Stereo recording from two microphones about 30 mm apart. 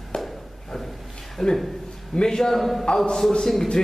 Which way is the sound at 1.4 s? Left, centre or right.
Centre.